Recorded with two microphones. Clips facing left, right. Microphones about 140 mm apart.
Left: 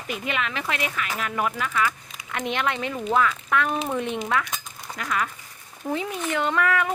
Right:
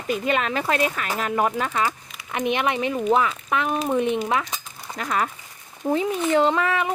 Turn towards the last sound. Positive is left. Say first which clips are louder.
# right 3 dB
turn(degrees=-25)  # may be behind; listen again after turning